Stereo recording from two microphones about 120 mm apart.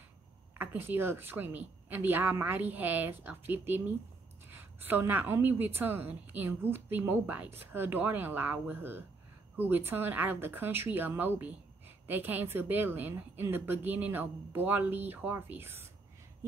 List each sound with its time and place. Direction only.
0.6 s a woman's voice: 15° right (ahead or behind)